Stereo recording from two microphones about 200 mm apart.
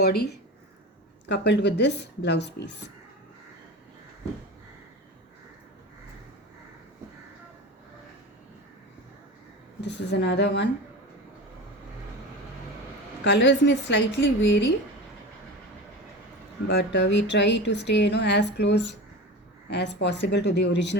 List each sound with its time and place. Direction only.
0.0 s speech: 55° left (ahead or behind)
1.3 s speech: 60° left (ahead or behind)
9.8 s speech: 60° left (ahead or behind)
13.2 s speech: 60° left (ahead or behind)
16.6 s speech: 60° left (ahead or behind)